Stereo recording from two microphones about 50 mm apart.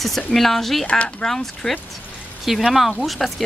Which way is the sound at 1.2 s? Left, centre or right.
Centre.